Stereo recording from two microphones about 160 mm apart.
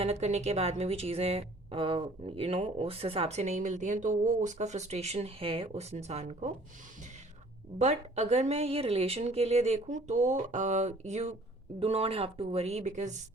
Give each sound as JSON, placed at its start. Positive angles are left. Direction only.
{"t": 0.0, "sound": "speech", "side_deg": -40}
{"t": 7.8, "sound": "a woman's voice", "side_deg": -45}